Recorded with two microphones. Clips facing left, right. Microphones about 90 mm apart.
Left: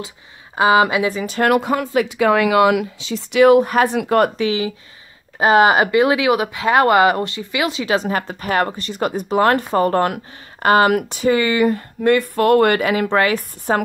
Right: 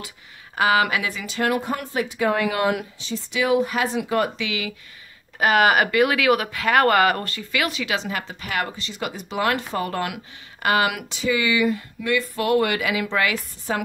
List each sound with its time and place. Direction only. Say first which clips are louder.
0.6 s speech: left 6 dB; 25° left (ahead or behind)
1.1 s speech: left 6 dB; 45° left (ahead or behind)
1.5 s speech: left 8 dB; 90° left; by 4.3 s 60° left (ahead or behind)
4.4 s speech: left 9 dB; 35° left (ahead or behind)